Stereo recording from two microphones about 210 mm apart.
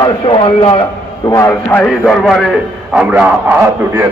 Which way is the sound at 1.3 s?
15° left (ahead or behind).